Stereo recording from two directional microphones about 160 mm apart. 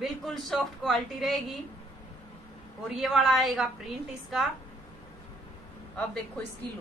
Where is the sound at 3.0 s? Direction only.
Centre (ahead or behind).